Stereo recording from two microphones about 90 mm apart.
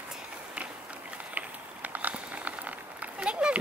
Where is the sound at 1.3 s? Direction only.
15° right (ahead or behind).